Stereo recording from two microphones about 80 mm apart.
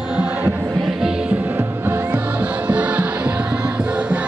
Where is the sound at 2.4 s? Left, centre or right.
Centre.